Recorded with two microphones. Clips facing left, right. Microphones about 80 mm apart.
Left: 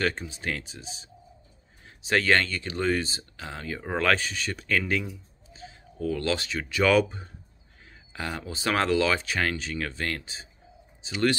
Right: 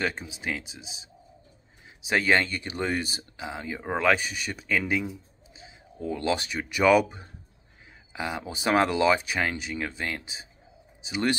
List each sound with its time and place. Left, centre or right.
0.0 s speech: centre
2.0 s speech: centre